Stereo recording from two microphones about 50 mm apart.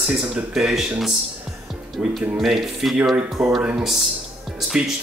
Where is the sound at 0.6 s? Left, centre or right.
Centre.